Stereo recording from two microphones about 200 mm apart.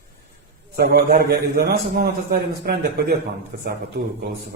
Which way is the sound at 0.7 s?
50° right (ahead or behind).